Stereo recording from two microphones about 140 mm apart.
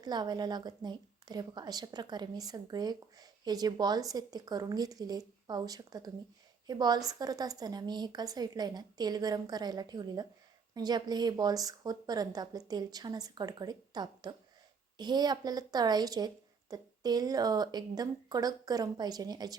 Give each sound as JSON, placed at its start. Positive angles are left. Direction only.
{"t": 0.0, "sound": "a woman's voice", "side_deg": -30}